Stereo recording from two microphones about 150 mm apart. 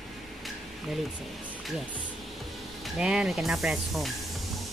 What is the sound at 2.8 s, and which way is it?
Speech, centre (ahead or behind).